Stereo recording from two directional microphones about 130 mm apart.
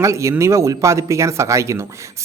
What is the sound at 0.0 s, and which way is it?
Speech, 25° right (ahead or behind).